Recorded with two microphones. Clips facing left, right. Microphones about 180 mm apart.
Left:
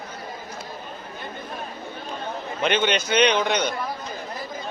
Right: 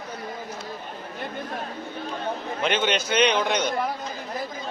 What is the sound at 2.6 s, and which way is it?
A man's voice, centre (ahead or behind).